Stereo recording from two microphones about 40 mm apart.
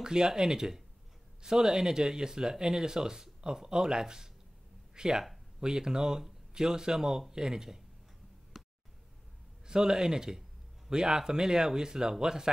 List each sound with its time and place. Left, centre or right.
0.0 s speech: centre
8.5 s a sound: centre
9.7 s speech: centre